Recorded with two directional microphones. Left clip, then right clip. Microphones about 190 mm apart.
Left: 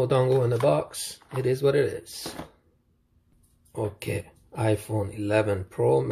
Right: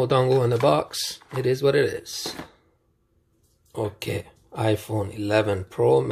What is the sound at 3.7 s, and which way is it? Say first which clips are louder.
Speech: right 2 dB; 10° right (ahead or behind).